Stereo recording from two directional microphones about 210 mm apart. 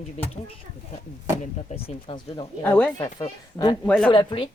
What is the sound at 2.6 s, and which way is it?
Speech, 10° left (ahead or behind).